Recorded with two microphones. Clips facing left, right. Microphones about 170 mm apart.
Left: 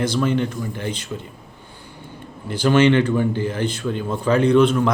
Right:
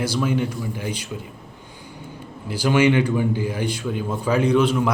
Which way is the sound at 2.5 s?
10° right (ahead or behind).